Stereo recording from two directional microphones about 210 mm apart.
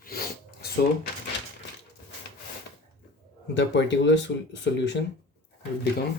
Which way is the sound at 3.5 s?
55° left (ahead or behind).